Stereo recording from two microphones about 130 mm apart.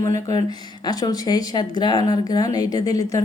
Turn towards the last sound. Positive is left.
turn(degrees=25)  # may be behind; listen again after turning